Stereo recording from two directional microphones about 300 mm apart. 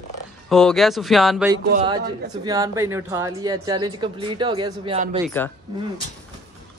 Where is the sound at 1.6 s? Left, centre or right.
Right.